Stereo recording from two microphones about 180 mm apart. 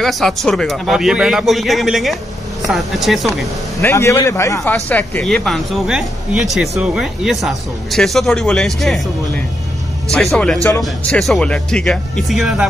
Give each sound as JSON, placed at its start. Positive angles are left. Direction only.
{"t": 0.0, "sound": "speech", "side_deg": 0}
{"t": 3.8, "sound": "a man's voice", "side_deg": 15}
{"t": 10.1, "sound": "speech", "side_deg": 5}